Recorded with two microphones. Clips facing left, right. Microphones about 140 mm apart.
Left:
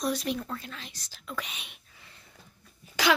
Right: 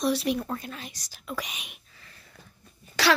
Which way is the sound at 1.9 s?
20° left (ahead or behind).